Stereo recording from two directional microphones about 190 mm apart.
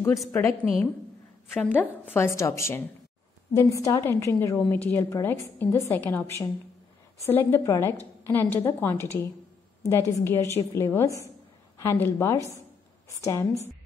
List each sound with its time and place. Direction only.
0.3 s a woman's voice: 10° left (ahead or behind)